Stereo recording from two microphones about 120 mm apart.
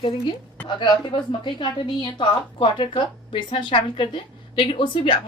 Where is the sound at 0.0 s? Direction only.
40° left (ahead or behind).